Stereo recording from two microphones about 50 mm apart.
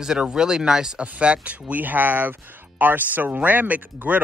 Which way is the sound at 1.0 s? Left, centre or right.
Right.